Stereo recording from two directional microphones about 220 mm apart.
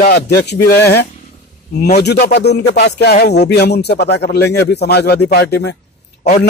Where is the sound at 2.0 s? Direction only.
50° left (ahead or behind).